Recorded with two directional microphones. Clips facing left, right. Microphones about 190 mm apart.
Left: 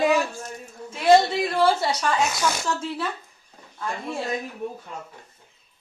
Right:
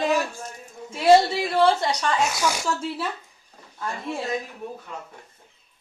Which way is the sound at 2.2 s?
10° right (ahead or behind).